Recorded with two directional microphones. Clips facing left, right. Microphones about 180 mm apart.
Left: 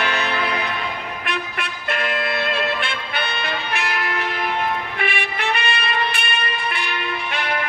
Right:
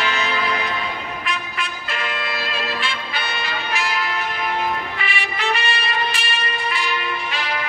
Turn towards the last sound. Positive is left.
turn(degrees=60)  # may be behind; listen again after turning